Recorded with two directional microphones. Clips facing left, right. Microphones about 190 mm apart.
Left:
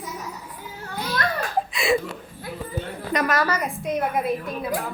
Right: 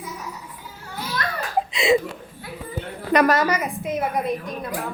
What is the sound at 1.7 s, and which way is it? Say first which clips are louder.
Chuckle: right 4 dB; 20° right (ahead or behind).